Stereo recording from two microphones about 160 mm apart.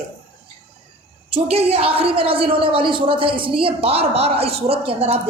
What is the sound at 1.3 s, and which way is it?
A woman's voice, 40° right (ahead or behind).